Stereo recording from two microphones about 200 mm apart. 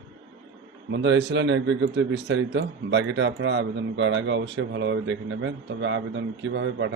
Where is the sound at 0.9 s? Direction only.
60° right (ahead or behind).